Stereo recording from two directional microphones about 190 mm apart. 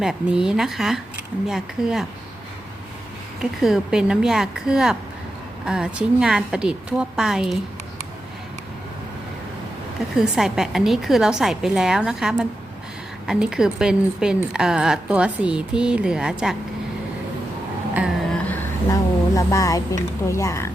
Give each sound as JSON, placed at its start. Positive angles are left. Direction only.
{"t": 0.0, "sound": "a woman's voice", "side_deg": -5}
{"t": 3.6, "sound": "a woman's voice", "side_deg": -5}
{"t": 10.2, "sound": "a woman's voice", "side_deg": 0}
{"t": 17.9, "sound": "a sound", "side_deg": -5}
{"t": 19.4, "sound": "a woman's voice", "side_deg": 15}